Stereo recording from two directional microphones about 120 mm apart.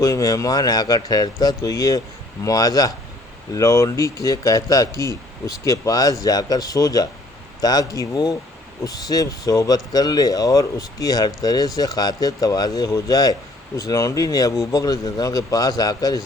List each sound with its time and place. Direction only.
0.0 s speech: 30° left (ahead or behind)